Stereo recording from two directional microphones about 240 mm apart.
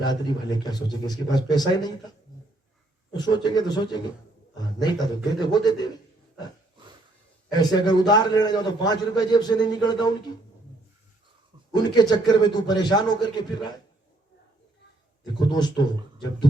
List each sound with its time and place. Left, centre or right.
0.0 s a man's voice: centre
3.1 s a man's voice: centre
7.5 s a man's voice: centre
11.7 s a man's voice: centre
15.4 s a man's voice: centre